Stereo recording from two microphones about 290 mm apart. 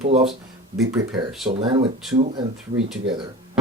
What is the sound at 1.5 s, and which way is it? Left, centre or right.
Speech, centre.